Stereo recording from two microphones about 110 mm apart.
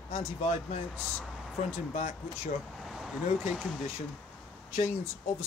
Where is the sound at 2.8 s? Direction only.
5° right (ahead or behind).